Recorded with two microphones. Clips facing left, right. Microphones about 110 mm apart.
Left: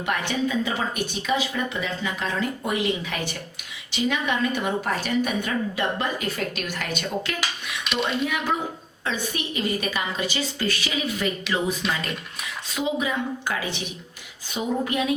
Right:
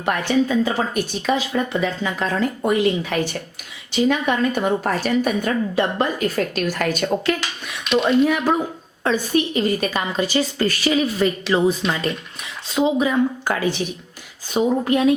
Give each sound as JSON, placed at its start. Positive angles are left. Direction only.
{"t": 0.0, "sound": "a woman's voice", "side_deg": -35}
{"t": 14.5, "sound": "a woman's voice", "side_deg": -40}